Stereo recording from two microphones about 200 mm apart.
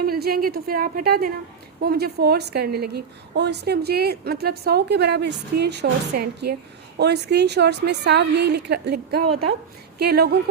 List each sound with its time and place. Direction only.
0.0 s a woman's voice: 50° right (ahead or behind)